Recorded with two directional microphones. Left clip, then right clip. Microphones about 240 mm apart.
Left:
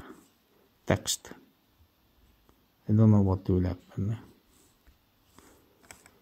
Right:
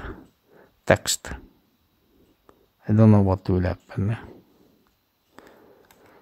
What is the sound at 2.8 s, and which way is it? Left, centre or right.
Speech, right.